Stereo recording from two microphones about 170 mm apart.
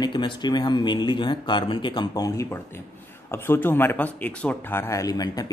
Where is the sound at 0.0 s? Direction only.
25° left (ahead or behind).